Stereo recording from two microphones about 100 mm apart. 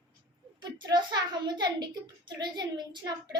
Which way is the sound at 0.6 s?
50° right (ahead or behind).